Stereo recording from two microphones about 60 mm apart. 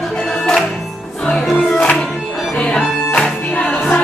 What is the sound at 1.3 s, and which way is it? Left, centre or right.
Music, centre.